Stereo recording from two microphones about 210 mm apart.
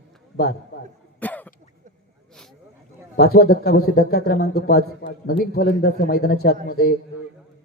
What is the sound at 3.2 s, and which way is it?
Speech, 50° left (ahead or behind).